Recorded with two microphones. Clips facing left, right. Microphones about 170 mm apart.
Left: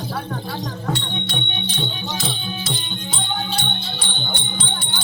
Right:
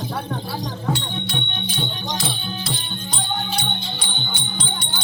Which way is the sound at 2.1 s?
Centre (ahead or behind).